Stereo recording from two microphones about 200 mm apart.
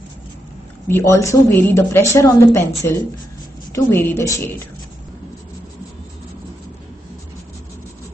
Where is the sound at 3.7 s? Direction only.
10° left (ahead or behind).